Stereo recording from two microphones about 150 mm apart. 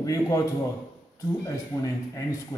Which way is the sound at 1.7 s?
20° left (ahead or behind).